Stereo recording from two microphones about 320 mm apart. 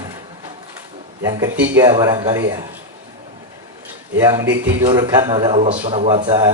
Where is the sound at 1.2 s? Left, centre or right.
Centre.